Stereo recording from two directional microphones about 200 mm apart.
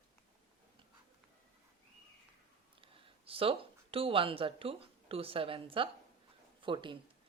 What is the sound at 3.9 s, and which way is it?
A woman's voice, 25° right (ahead or behind).